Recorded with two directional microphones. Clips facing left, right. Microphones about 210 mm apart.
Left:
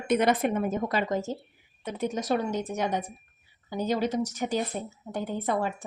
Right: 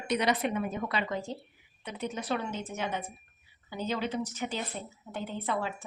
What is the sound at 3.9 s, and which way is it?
Speech, 40° left (ahead or behind).